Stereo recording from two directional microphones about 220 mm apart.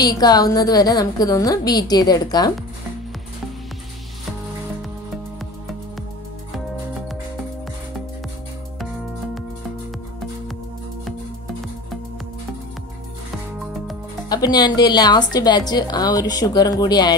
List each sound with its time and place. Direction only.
0.0 s a woman's voice: 15° left (ahead or behind)
14.3 s a woman's voice: 20° left (ahead or behind)